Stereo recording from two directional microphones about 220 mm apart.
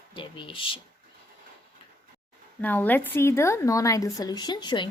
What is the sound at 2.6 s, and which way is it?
A woman's voice, 10° left (ahead or behind).